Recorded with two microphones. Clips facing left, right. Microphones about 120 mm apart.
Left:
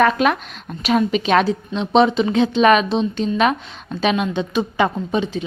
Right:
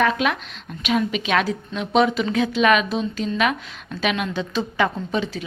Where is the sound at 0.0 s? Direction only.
45° left (ahead or behind).